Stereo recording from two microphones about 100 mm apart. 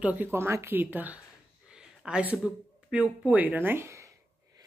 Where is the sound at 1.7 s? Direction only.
10° right (ahead or behind).